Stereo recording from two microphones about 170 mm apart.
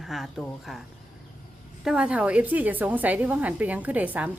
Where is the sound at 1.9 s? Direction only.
5° right (ahead or behind).